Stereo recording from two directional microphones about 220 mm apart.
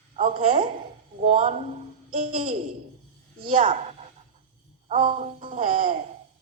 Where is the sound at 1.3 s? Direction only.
30° right (ahead or behind).